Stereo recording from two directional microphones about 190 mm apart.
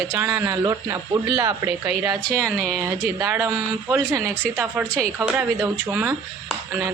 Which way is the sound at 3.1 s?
20° right (ahead or behind).